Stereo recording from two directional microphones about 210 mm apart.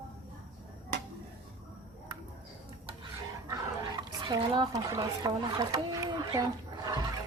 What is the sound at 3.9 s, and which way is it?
Speech, 20° right (ahead or behind).